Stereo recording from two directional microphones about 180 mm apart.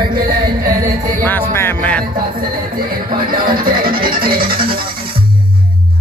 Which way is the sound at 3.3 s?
55° right (ahead or behind).